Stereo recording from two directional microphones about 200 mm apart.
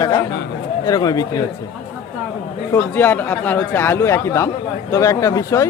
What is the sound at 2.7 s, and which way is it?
Speech, 10° left (ahead or behind).